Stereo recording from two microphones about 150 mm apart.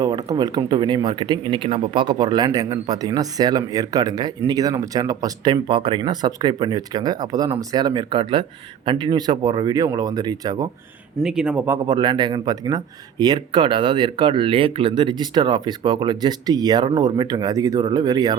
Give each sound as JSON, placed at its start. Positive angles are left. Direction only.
{"t": 0.0, "sound": "speech", "side_deg": -25}
{"t": 11.2, "sound": "speech", "side_deg": -5}
{"t": 11.9, "sound": "speech", "side_deg": -30}